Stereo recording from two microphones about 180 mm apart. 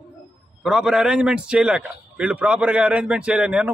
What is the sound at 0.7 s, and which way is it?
A man's voice, 5° right (ahead or behind).